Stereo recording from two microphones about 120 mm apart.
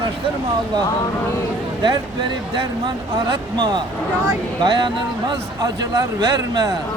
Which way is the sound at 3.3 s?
40° right (ahead or behind).